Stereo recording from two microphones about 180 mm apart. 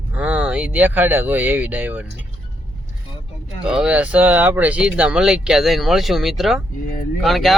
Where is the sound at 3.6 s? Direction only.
5° right (ahead or behind).